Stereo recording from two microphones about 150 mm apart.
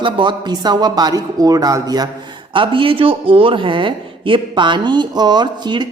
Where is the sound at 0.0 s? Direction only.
30° right (ahead or behind).